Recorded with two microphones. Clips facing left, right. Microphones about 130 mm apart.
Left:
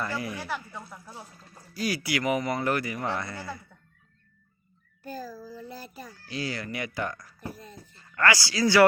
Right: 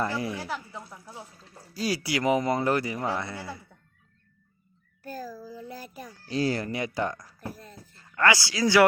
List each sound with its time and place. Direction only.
0.0 s speech: 30° right (ahead or behind)
0.9 s a sound: centre (ahead or behind)
1.7 s speech: 30° right (ahead or behind)
3.2 s a child's voice: 10° right (ahead or behind)
5.0 s child singing: 5° right (ahead or behind)
5.9 s a child's voice: 10° right (ahead or behind)
6.2 s speech: 40° right (ahead or behind)
7.3 s a sound: 5° right (ahead or behind)
8.2 s speech: 20° right (ahead or behind)